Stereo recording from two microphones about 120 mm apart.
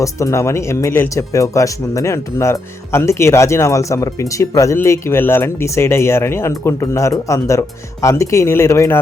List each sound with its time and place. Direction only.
0.0 s speech: 25° left (ahead or behind)